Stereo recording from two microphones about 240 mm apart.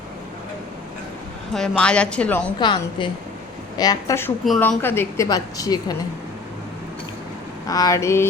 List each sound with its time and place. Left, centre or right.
1.5 s speech: centre
2.6 s a woman's voice: centre
4.4 s a woman's voice: centre
7.7 s a woman's voice: centre